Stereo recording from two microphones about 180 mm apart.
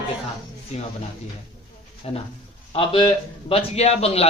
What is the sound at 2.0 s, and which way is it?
A man's voice, 35° left (ahead or behind).